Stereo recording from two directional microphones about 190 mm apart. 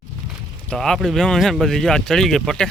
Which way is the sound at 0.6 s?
Centre (ahead or behind).